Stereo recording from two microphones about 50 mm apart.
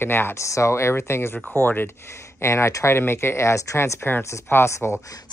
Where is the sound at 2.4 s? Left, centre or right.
Left.